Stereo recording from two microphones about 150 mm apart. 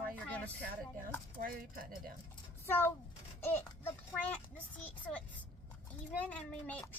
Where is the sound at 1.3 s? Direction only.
70° right (ahead or behind).